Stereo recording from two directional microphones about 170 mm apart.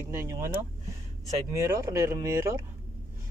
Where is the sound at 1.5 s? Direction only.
15° right (ahead or behind).